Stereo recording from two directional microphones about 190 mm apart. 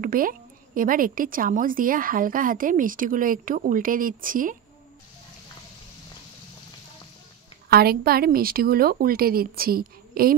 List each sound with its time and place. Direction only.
0.0 s a woman's voice: 45° right (ahead or behind)
7.7 s a woman's voice: 55° right (ahead or behind)